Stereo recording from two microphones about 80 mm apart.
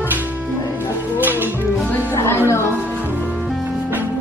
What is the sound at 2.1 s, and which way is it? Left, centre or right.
Speech, left.